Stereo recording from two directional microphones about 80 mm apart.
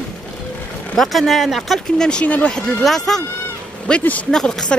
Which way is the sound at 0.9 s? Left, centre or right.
Centre.